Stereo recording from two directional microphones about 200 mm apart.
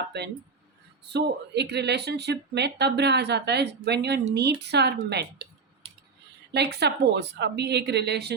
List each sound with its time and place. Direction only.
1.1 s speech: 55° right (ahead or behind)
6.5 s speech: 55° right (ahead or behind)